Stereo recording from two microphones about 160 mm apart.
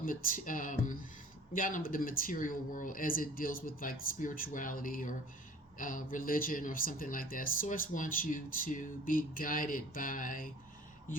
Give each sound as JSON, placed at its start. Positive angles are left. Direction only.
{"t": 0.0, "sound": "speech", "side_deg": 60}